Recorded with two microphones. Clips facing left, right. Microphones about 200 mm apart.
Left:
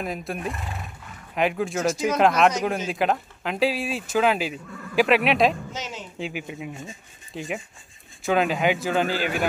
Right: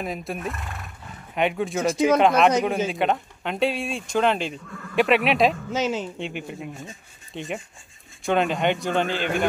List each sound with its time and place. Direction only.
0.0 s speech: centre (ahead or behind)
5.7 s a woman's voice: 55° right (ahead or behind)
6.1 s speech: centre (ahead or behind)